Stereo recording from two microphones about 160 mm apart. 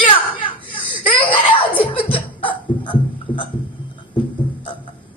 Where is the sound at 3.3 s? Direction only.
30° left (ahead or behind).